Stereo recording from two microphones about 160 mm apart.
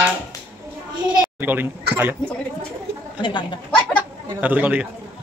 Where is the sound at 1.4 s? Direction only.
10° right (ahead or behind).